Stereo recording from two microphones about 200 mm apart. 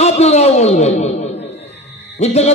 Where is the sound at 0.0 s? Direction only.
30° left (ahead or behind).